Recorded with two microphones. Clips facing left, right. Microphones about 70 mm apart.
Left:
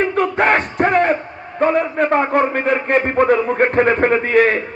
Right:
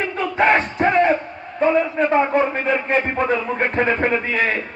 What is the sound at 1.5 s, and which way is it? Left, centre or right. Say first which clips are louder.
A man's voice: left 1 dB; left.